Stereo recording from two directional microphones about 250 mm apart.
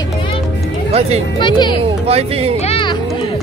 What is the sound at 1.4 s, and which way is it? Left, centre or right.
Speech, centre.